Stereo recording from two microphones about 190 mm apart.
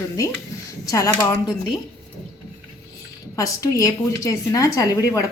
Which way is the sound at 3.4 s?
15° left (ahead or behind).